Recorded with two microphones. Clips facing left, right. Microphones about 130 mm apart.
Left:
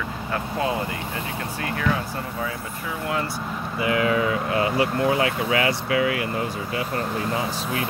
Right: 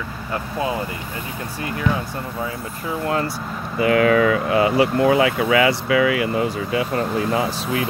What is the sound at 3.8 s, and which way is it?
Speech, 70° right (ahead or behind).